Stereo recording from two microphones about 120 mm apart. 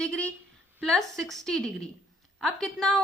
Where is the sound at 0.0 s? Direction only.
10° left (ahead or behind).